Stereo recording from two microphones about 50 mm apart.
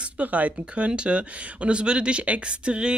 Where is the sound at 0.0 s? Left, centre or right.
Right.